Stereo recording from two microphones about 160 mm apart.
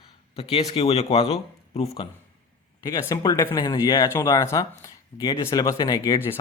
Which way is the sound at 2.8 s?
25° left (ahead or behind).